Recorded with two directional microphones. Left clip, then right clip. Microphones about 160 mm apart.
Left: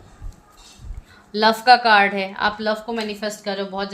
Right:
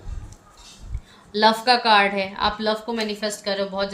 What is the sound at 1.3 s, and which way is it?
A woman's voice, 45° left (ahead or behind).